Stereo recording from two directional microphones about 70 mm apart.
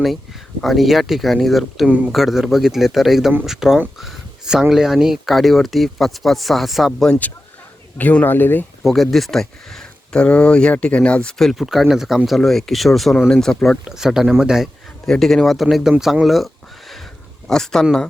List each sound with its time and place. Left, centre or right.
0.6 s speech: centre
1.9 s speech: right
2.1 s speech: centre
3.9 s a sound: centre
4.7 s speech: centre
7.9 s speech: left
8.8 s speech: centre
11.5 s speech: centre
13.8 s speech: centre
15.0 s speech: centre
17.5 s speech: centre